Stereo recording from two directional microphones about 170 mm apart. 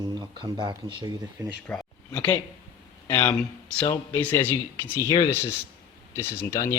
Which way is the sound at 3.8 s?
20° left (ahead or behind).